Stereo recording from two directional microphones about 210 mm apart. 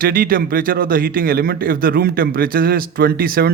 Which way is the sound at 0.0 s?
45° right (ahead or behind).